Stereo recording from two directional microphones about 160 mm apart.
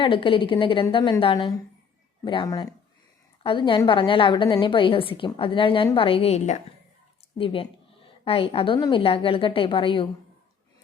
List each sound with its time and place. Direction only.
0.0 s a woman's voice: 35° left (ahead or behind)